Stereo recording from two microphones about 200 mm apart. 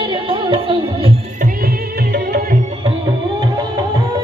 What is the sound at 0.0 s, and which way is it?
Music, 25° right (ahead or behind).